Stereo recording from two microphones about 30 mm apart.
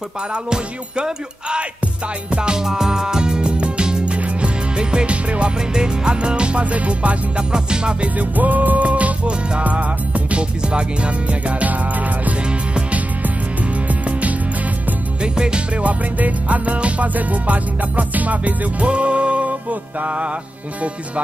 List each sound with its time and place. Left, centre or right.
0.3 s music: right
2.6 s music: centre; by 5.5 s right
5.7 s music: right
6.6 s music: right
7.5 s music: right
8.2 s music: right
10.6 s music: right
13.8 s music: right
15.2 s music: right
15.7 s music: right
17.1 s music: right
18.9 s music: right